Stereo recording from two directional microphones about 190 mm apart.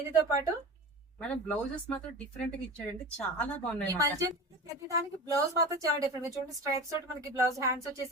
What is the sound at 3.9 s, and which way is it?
Speech, 20° right (ahead or behind).